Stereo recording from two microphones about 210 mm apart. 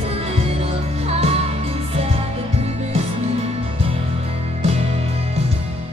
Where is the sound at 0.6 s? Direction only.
30° right (ahead or behind).